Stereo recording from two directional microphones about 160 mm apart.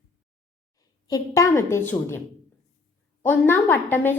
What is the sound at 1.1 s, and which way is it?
A woman's voice, 20° left (ahead or behind).